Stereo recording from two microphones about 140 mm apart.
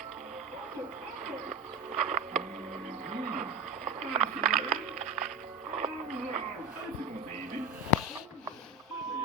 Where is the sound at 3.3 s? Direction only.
55° right (ahead or behind).